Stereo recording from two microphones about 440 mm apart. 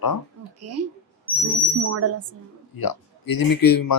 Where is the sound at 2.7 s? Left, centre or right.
Left.